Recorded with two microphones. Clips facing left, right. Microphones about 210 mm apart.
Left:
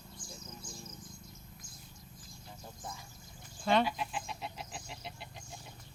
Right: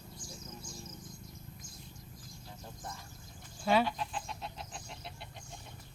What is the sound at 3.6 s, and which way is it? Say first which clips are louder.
Chicken: even; 5° right (ahead or behind).